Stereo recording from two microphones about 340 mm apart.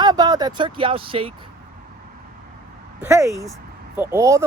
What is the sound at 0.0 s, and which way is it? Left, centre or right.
Speech, centre.